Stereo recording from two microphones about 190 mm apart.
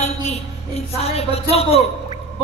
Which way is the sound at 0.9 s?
30° left (ahead or behind).